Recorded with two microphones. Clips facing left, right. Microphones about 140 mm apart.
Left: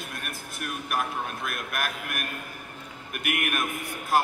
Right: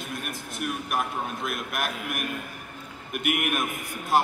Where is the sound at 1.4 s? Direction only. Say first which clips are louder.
Right 2 dB; 25° right (ahead or behind).